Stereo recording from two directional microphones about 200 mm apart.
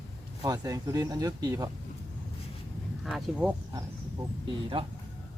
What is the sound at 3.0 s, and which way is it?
Speech, centre (ahead or behind).